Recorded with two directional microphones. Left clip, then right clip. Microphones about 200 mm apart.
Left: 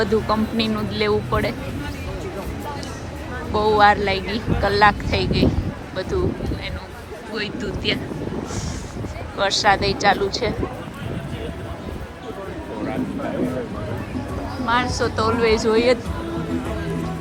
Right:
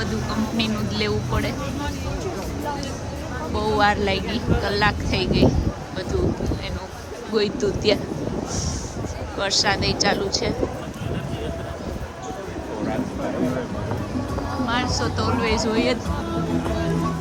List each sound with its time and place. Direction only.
0.0 s speech: 5° right (ahead or behind)
3.5 s speech: 10° right (ahead or behind)
7.3 s speech: 30° right (ahead or behind)
9.4 s speech: 10° right (ahead or behind)
14.7 s speech: 5° right (ahead or behind)